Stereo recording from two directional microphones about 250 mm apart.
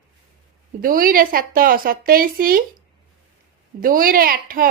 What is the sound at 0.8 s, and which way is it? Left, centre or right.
A woman's voice, right.